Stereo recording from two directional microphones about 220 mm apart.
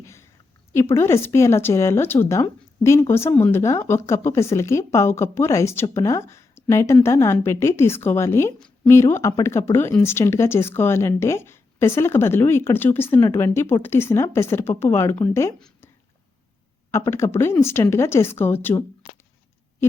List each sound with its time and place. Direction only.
0.0 s a sound: 10° left (ahead or behind)
0.7 s speech: 10° left (ahead or behind)
16.9 s speech: 10° left (ahead or behind)